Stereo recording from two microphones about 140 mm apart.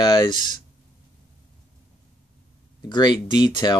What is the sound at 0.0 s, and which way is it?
Speech, 30° left (ahead or behind).